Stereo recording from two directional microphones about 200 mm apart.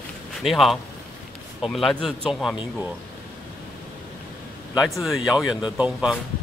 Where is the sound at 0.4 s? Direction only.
Centre (ahead or behind).